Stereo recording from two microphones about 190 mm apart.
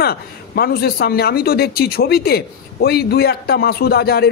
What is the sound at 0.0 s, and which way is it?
A man's voice, 55° left (ahead or behind).